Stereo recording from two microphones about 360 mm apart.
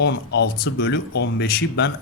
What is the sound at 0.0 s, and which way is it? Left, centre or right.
A man's voice, left.